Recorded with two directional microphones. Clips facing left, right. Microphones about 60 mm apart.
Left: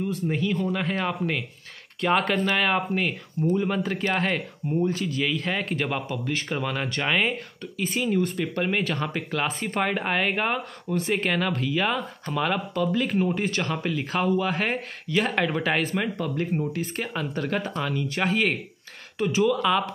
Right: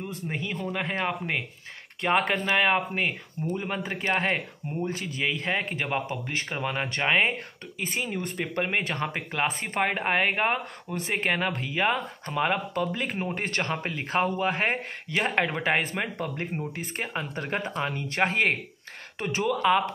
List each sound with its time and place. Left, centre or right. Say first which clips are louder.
0.1 s speech: left 7 dB; right
17.8 s speech: left 1 dB; right